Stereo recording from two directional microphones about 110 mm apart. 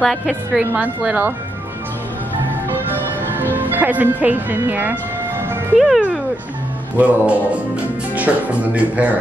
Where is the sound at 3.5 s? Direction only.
15° right (ahead or behind).